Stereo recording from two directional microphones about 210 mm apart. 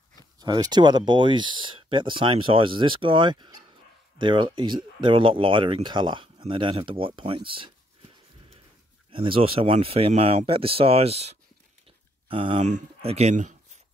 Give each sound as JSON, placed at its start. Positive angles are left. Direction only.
{"t": 0.4, "sound": "speech", "side_deg": -20}
{"t": 9.1, "sound": "speech", "side_deg": -25}